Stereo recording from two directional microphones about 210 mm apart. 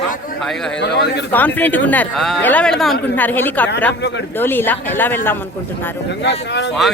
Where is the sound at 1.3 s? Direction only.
10° left (ahead or behind).